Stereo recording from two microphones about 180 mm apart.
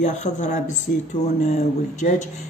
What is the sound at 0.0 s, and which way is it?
Speech, 40° left (ahead or behind).